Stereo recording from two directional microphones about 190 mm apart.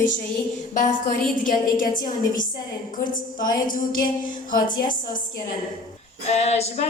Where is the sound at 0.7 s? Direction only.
45° left (ahead or behind).